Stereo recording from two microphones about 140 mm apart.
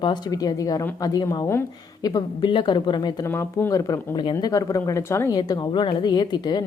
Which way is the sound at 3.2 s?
15° left (ahead or behind).